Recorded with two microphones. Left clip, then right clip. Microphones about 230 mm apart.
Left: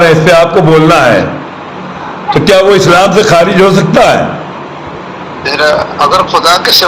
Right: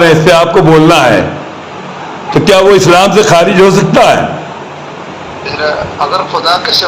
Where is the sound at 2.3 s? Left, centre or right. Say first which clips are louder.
Even; right.